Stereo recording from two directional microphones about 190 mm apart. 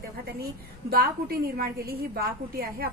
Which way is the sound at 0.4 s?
55° right (ahead or behind).